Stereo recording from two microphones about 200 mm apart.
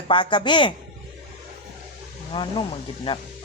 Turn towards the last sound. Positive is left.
turn(degrees=25)  # may be behind; listen again after turning